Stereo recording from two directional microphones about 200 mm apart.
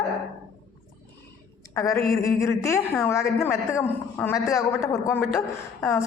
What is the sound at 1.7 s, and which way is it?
A woman's voice, 15° left (ahead or behind).